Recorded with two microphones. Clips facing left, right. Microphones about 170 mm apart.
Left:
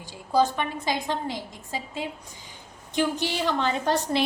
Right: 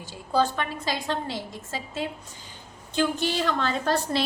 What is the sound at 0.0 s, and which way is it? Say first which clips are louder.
A woman's voice: left 2 dB; 15° left (ahead or behind).